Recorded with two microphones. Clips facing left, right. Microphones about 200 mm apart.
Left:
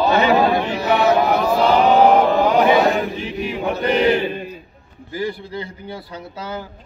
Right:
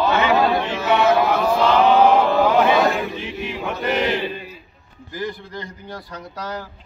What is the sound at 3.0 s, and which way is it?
Speech, 40° left (ahead or behind).